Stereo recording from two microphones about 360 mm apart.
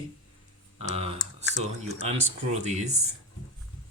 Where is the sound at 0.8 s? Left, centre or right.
Centre.